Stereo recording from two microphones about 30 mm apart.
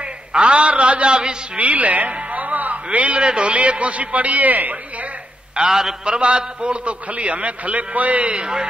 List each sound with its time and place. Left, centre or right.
0.0 s a man's voice: right
1.6 s a man's voice: right
3.2 s a man's voice: right
5.6 s a man's voice: centre
6.0 s a man's voice: right
8.4 s a sound: right